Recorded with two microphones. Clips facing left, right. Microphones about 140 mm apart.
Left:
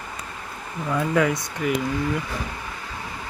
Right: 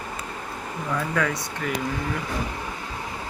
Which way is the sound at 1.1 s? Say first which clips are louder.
Left 4 dB; 20° left (ahead or behind).